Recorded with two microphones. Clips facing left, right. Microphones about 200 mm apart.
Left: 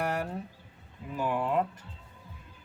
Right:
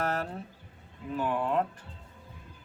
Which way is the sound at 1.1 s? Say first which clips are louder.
Even; 10° left (ahead or behind).